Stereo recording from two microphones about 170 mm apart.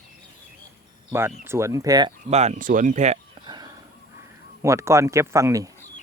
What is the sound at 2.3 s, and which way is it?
Speech, 40° right (ahead or behind).